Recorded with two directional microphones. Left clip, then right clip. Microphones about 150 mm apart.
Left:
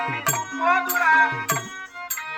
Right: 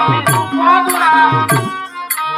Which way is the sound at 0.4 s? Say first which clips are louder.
Right 9 dB; 30° left (ahead or behind).